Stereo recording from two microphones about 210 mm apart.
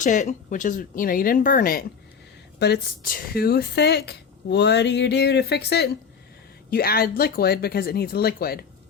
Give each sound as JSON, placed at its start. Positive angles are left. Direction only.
{"t": 0.0, "sound": "speech", "side_deg": 35}